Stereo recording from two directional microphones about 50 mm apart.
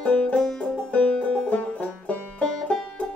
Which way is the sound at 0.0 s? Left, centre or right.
Left.